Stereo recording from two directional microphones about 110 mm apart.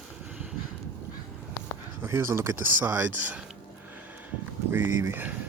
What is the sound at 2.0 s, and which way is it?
Speech, 25° right (ahead or behind).